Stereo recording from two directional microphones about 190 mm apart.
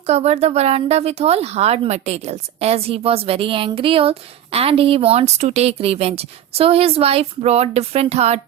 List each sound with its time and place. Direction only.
0.0 s speech: 35° right (ahead or behind)